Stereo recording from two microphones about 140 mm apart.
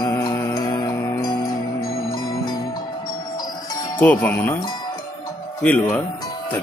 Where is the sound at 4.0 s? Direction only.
15° left (ahead or behind).